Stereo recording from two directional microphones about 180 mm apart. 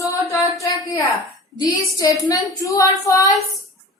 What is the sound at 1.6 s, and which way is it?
A woman's voice, 20° left (ahead or behind).